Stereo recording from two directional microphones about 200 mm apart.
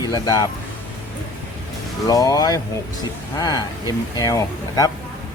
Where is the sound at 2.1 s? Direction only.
20° left (ahead or behind).